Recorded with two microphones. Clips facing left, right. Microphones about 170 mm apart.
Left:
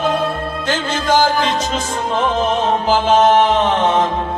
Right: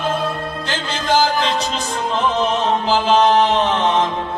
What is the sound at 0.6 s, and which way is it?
Music, 45° left (ahead or behind).